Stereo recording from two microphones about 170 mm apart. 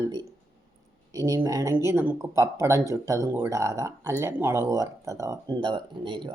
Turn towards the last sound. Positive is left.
turn(degrees=-30)  # may be behind; listen again after turning